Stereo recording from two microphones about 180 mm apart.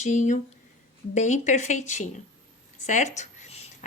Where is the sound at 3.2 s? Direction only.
40° left (ahead or behind).